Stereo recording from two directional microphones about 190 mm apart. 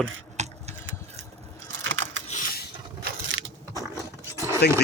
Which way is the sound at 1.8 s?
85° right.